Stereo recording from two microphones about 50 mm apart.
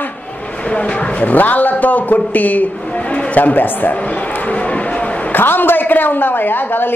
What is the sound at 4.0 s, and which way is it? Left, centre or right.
Speech, left.